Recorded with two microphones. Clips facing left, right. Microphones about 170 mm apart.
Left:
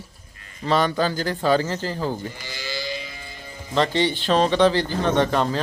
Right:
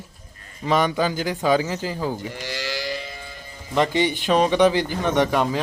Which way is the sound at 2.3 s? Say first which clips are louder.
Right 5 dB; 75° right (ahead or behind).